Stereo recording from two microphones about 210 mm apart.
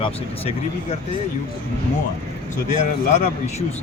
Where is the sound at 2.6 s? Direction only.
35° left (ahead or behind).